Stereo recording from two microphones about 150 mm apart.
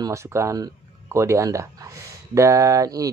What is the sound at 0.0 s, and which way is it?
Speech, 20° right (ahead or behind).